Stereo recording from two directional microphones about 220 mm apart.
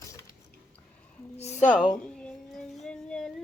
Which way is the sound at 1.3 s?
30° left (ahead or behind).